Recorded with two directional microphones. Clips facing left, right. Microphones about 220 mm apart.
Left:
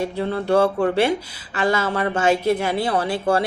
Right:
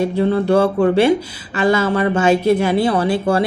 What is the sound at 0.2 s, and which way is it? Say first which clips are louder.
Speech: right 3 dB; 25° right (ahead or behind).